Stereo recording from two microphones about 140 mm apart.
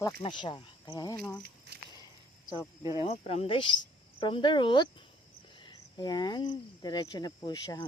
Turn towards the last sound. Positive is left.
turn(degrees=30)  # may be behind; listen again after turning